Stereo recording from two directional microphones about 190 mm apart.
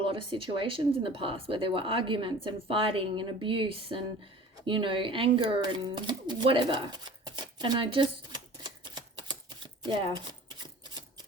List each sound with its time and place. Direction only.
0.0 s speech: 25° right (ahead or behind)
9.2 s a sound: 25° right (ahead or behind)
10.6 s typewriter: 20° right (ahead or behind)